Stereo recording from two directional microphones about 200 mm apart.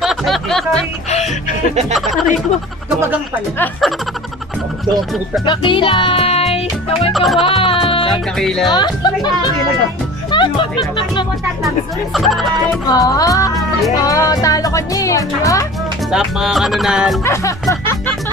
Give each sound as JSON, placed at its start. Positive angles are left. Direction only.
{"t": 0.0, "sound": "snicker", "side_deg": 0}
{"t": 2.0, "sound": "a sound", "side_deg": 0}
{"t": 3.5, "sound": "speech", "side_deg": 10}
{"t": 5.4, "sound": "music", "side_deg": 25}
{"t": 7.1, "sound": "music", "side_deg": 0}
{"t": 7.4, "sound": "music", "side_deg": 25}
{"t": 8.1, "sound": "speech", "side_deg": 0}
{"t": 8.6, "sound": "speech", "side_deg": 20}
{"t": 10.3, "sound": "music", "side_deg": 25}
{"t": 11.6, "sound": "speech", "side_deg": 0}
{"t": 12.8, "sound": "speech", "side_deg": 20}
{"t": 16.1, "sound": "speech", "side_deg": 0}
{"t": 17.2, "sound": "music", "side_deg": 15}